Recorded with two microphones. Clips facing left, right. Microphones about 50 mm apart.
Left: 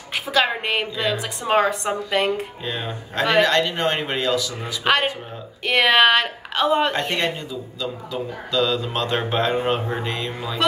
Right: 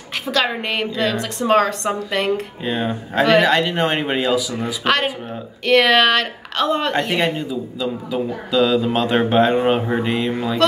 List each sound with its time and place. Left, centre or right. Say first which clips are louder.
0.3 s a woman's voice: even; centre
2.6 s speech: right 6 dB; centre
5.7 s a woman's voice: right 2 dB; centre
6.9 s speech: right 4 dB; centre